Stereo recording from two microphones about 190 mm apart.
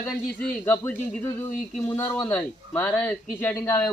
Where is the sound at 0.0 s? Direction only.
10° left (ahead or behind).